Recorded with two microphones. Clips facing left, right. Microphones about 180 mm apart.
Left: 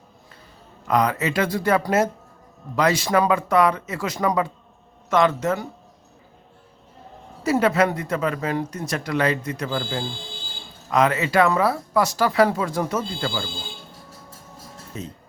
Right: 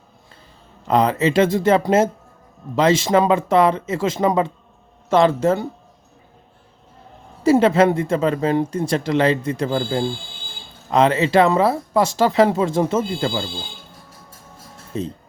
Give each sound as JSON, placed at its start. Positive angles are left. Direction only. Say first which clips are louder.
{"t": 0.9, "sound": "speech", "louder": "right 4 dB", "side_deg": -25}
{"t": 7.4, "sound": "speech", "louder": "right 5 dB", "side_deg": -25}
{"t": 14.9, "sound": "speech", "louder": "right 9 dB", "side_deg": -30}